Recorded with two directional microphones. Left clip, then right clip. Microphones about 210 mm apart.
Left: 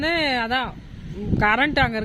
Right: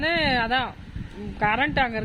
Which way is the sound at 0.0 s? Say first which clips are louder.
Left 1 dB; 15° left (ahead or behind).